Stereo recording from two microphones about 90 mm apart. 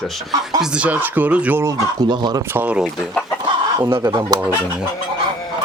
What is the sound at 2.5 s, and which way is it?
Speech, 15° right (ahead or behind).